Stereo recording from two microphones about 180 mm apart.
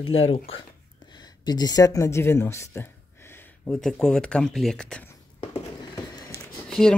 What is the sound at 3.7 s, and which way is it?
Speech, 5° left (ahead or behind).